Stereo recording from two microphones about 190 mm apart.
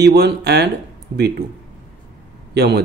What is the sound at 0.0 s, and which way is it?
Speech, 60° right (ahead or behind).